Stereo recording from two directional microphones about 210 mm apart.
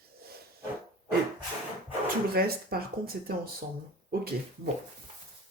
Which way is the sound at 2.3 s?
45° right (ahead or behind).